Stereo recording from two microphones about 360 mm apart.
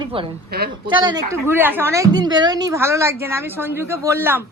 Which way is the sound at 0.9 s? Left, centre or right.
Centre.